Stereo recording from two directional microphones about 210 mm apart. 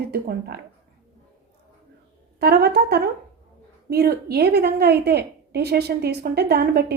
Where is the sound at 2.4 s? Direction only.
50° right (ahead or behind).